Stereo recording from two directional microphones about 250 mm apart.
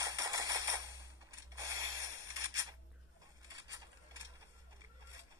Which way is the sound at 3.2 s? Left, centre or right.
Centre.